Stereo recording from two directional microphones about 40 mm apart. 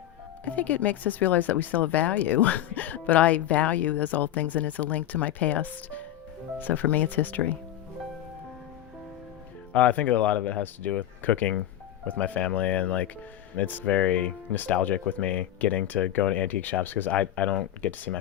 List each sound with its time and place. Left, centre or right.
0.4 s speech: left
9.7 s speech: left
13.6 s speech: left
13.8 s speech: left
17.1 s speech: left